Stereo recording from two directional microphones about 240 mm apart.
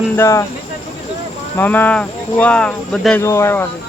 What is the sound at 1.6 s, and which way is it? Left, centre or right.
Speech, centre.